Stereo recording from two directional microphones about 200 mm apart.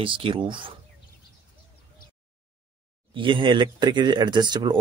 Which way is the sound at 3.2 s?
25° right (ahead or behind).